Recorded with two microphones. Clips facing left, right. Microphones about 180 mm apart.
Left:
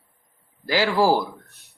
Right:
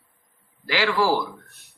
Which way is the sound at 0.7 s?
40° left (ahead or behind).